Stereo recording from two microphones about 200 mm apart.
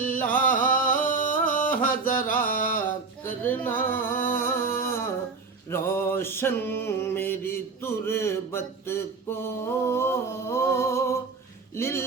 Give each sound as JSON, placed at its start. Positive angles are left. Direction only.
{"t": 0.3, "sound": "music", "side_deg": 45}
{"t": 3.4, "sound": "music", "side_deg": 10}
{"t": 5.7, "sound": "mantra", "side_deg": 10}
{"t": 11.8, "sound": "speech", "side_deg": 15}